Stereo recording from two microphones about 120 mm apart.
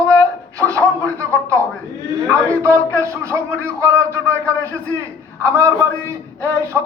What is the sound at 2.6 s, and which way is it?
Speech, 25° right (ahead or behind).